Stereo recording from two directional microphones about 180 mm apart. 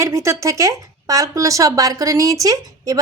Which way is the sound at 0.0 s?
15° right (ahead or behind).